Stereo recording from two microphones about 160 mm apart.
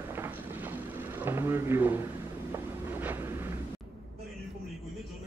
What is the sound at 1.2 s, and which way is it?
Speech, 15° right (ahead or behind).